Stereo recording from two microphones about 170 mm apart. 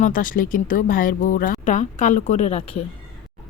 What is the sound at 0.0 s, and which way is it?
Speech, 55° left (ahead or behind).